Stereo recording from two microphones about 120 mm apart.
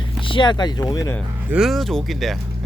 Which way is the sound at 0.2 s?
45° left (ahead or behind).